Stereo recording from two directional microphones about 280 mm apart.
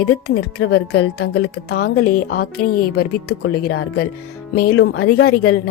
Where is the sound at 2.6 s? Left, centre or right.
Left.